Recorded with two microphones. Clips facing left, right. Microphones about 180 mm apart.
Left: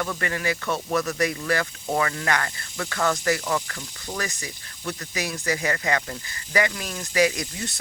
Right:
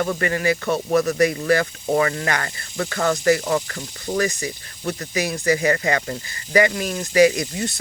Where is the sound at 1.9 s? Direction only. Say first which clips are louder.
Right 4 dB; 35° right (ahead or behind).